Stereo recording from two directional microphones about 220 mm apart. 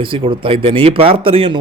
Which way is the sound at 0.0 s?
25° right (ahead or behind).